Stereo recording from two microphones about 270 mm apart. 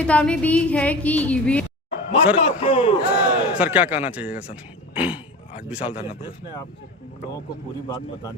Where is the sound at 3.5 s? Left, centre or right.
Centre.